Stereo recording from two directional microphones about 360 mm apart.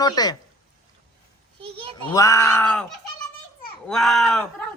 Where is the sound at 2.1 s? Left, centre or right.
Centre.